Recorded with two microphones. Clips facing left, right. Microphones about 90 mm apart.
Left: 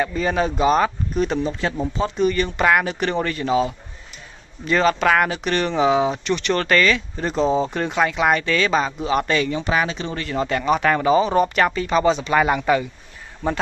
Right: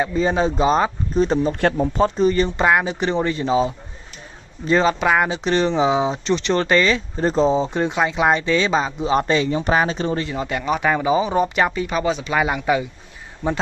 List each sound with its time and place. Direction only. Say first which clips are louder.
0.0 s speech: right 2 dB; 25° right (ahead or behind)
1.5 s speech: right 5 dB; 55° right (ahead or behind)
2.0 s speech: right 1 dB; 35° right (ahead or behind)
7.5 s speech: right 1 dB; 20° right (ahead or behind)
9.6 s speech: right 3 dB; 40° right (ahead or behind)
10.3 s speech: left 2 dB; 10° right (ahead or behind)